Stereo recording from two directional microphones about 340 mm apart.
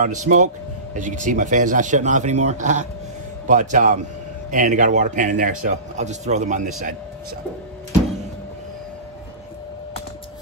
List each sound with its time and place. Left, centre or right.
0.0 s speech: right